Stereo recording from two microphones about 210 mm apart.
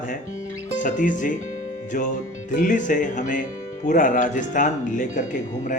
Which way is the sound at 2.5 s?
40° left (ahead or behind).